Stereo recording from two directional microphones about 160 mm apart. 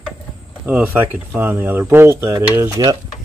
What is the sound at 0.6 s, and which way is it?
Speech, 10° right (ahead or behind).